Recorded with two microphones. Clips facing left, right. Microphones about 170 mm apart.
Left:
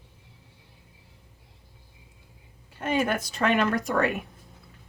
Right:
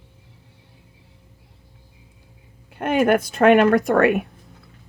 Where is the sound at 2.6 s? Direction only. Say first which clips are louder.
Right 8 dB; 60° right (ahead or behind).